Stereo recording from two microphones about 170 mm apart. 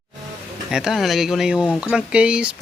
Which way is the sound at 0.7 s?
5° right (ahead or behind).